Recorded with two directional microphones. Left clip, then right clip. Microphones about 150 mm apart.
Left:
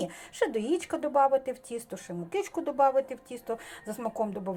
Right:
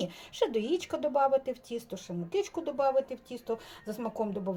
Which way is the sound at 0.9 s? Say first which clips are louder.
Left 2 dB; 10° left (ahead or behind).